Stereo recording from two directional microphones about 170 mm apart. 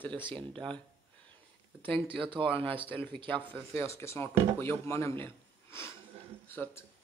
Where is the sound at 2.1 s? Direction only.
30° right (ahead or behind).